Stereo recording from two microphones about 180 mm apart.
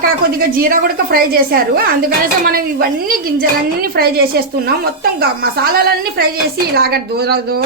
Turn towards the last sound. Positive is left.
turn(degrees=-60)  # may be behind; listen again after turning